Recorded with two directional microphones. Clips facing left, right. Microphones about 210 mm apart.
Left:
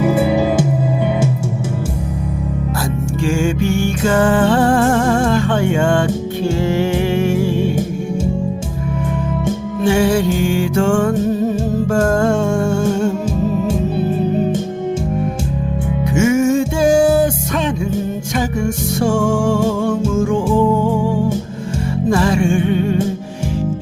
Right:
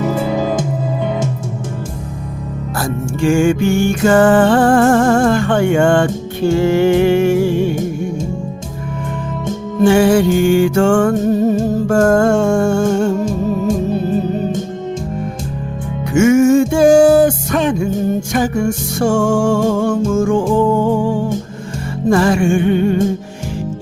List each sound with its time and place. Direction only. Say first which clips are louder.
0.0 s music: left 2 dB; 10° left (ahead or behind)
3.2 s music: right 5 dB; 50° right (ahead or behind)
9.8 s music: right 4 dB; 50° right (ahead or behind)
16.1 s music: right 5 dB; 50° right (ahead or behind)
22.1 s music: right 3 dB; 50° right (ahead or behind)